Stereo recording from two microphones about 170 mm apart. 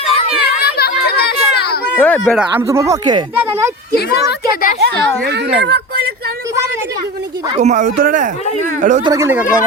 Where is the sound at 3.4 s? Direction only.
15° right (ahead or behind).